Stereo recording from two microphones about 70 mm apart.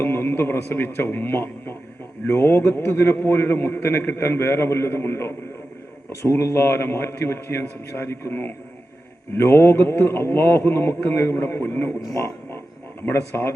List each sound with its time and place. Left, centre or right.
0.0 s a man's voice: left
12.1 s a sound: left
13.0 s a man's voice: left